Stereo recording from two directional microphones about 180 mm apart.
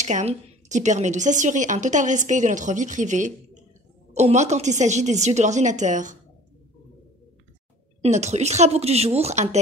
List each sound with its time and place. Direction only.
0.0 s a woman's voice: 40° right (ahead or behind)
8.0 s a woman's voice: 40° right (ahead or behind)